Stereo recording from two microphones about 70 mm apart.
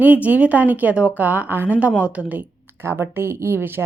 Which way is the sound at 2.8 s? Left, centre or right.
Right.